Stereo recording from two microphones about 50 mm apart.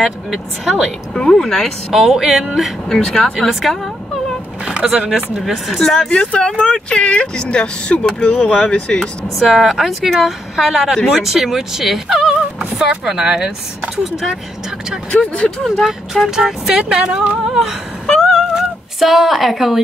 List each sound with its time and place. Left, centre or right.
0.0 s speech: centre
1.3 s speech: centre
2.0 s speech: centre
2.9 s speech: centre
3.3 s speech: centre
5.1 s speech: centre
5.9 s speech: centre
9.4 s speech: centre
10.5 s speech: centre
15.0 s speech: left
15.8 s speech: centre
17.5 s a sound: centre
18.0 s a sound: centre
18.5 s cat: centre